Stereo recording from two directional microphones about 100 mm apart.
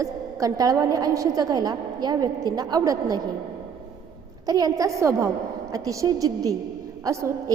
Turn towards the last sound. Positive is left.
turn(degrees=-30)  # may be behind; listen again after turning